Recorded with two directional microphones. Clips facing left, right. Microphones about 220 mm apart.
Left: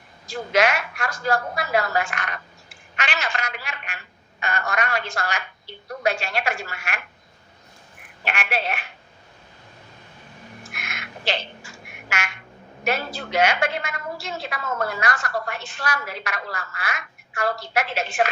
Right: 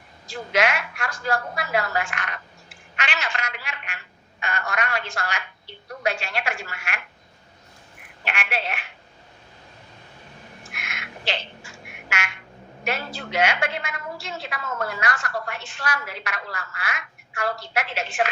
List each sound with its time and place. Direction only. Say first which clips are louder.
0.3 s a woman's voice: left 3 dB; 40° left (ahead or behind)
8.2 s a woman's voice: left 3 dB; 40° left (ahead or behind)
10.8 s a sound: even; 40° left (ahead or behind)
12.8 s a woman's voice: left 3 dB; 40° left (ahead or behind)